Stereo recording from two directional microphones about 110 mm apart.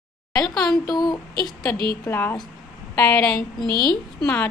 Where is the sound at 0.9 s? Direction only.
40° left (ahead or behind).